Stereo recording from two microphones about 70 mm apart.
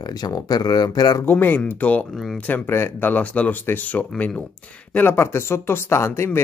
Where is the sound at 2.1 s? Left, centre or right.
Centre.